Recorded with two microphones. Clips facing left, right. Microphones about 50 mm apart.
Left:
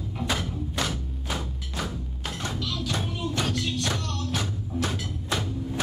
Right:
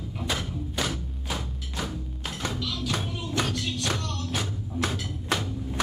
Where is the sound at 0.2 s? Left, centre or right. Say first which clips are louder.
Left 2 dB; centre.